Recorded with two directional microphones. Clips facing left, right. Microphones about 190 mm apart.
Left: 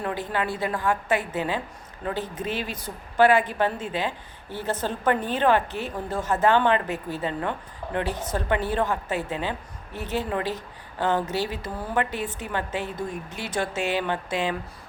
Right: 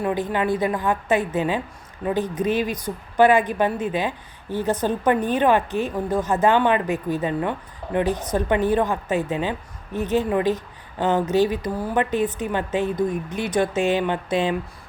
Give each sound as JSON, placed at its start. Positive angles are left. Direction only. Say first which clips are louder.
{"t": 0.0, "sound": "a woman's voice", "louder": "right 5 dB", "side_deg": -15}